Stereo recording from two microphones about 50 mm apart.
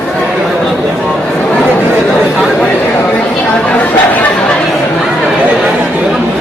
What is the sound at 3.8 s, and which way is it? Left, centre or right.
Chatter, left.